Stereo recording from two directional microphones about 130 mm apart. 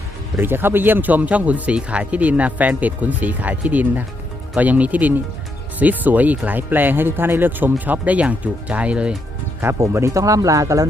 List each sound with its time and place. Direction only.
0.3 s speech: 15° right (ahead or behind)
9.6 s speech: 20° right (ahead or behind)